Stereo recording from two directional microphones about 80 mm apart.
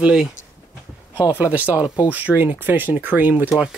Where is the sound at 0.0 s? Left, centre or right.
Centre.